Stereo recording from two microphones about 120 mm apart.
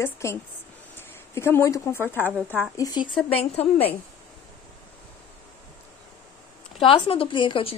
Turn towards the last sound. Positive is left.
turn(degrees=50)  # may be behind; listen again after turning